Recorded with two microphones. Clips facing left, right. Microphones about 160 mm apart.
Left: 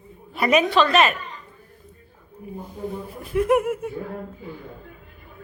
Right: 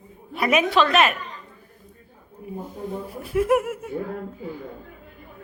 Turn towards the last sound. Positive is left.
turn(degrees=0)  # may be behind; listen again after turning